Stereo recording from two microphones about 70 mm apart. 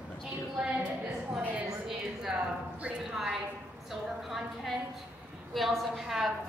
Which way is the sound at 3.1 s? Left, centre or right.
Centre.